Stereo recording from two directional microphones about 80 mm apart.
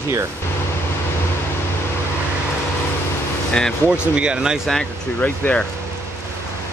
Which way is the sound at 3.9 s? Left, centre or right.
Centre.